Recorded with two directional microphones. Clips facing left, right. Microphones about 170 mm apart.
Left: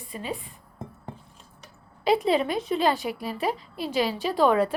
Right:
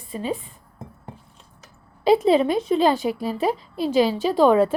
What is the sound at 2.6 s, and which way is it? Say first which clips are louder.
A woman's voice: right 5 dB; centre (ahead or behind).